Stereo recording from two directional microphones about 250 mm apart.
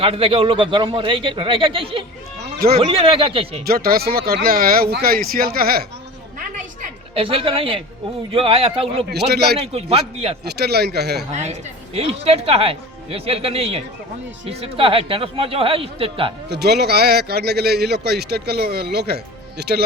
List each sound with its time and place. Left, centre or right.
0.0 s speech: right
2.4 s a sound: right
2.7 s speech: right
3.7 s speech: right
7.2 s speech: right
9.1 s speech: right
9.6 s speech: right
10.4 s speech: right
11.3 s speech: right
16.5 s speech: right